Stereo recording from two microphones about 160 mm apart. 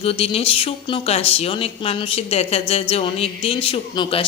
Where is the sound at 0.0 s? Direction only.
35° left (ahead or behind).